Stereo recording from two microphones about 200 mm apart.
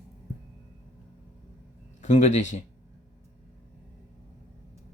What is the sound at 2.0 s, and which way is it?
Speech, 35° left (ahead or behind).